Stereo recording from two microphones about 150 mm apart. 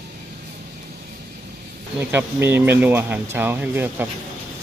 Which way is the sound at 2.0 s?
15° right (ahead or behind).